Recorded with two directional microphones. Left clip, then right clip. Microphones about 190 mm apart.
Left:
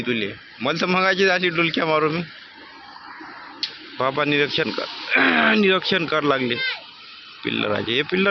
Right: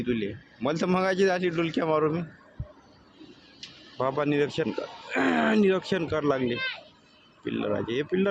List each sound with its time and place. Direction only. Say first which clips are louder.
0.0 s a man's voice: left 6 dB; 5° right (ahead or behind)
4.2 s a man's voice: left 6 dB; 5° right (ahead or behind)
4.9 s speech: left 11 dB; 50° right (ahead or behind)
5.1 s a man's voice: left 8 dB; 5° right (ahead or behind)